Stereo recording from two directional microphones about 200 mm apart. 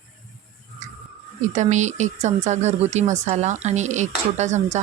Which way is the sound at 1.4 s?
35° right (ahead or behind).